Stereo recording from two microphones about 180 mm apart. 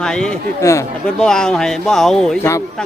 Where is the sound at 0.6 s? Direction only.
15° left (ahead or behind).